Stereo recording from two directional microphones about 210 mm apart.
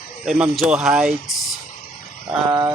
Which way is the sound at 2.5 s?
15° right (ahead or behind).